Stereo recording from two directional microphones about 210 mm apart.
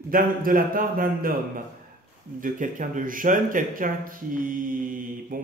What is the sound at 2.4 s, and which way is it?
Speech, 40° right (ahead or behind).